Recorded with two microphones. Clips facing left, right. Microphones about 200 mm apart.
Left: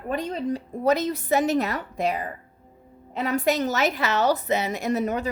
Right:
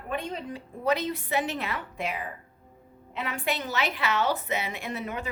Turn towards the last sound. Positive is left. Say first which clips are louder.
# left 9 dB
turn(degrees=40)  # may be behind; listen again after turning